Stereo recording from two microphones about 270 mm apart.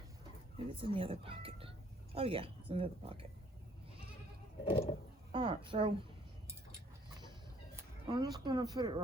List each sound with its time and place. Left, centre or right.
0.7 s speech: centre
4.6 s a sound: left
5.3 s speech: centre
8.0 s speech: centre